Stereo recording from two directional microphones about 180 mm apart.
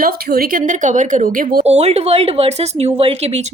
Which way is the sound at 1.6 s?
35° right (ahead or behind).